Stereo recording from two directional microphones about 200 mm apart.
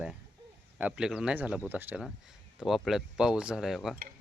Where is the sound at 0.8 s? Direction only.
5° right (ahead or behind).